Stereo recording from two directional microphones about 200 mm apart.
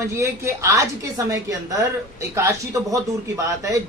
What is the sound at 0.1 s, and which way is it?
A woman's voice, 15° right (ahead or behind).